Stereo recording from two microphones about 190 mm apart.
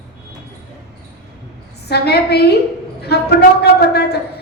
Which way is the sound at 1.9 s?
60° left (ahead or behind).